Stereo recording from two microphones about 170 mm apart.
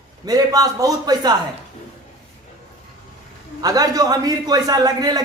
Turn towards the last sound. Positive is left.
turn(degrees=-20)  # may be behind; listen again after turning